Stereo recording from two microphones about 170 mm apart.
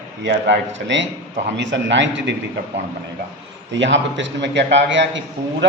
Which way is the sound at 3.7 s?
90° right.